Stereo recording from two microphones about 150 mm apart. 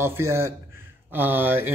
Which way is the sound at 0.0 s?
15° right (ahead or behind).